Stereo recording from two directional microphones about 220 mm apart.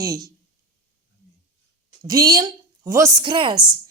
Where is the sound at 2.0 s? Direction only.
15° right (ahead or behind).